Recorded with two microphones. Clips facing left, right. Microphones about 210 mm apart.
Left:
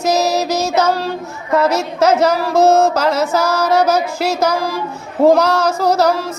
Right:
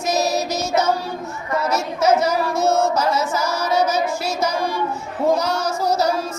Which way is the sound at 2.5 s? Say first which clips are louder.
Left 9 dB; 35° left (ahead or behind).